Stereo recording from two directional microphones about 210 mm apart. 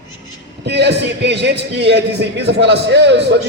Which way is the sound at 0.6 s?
55° right (ahead or behind).